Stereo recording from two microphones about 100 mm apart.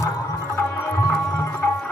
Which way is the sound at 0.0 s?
30° left (ahead or behind).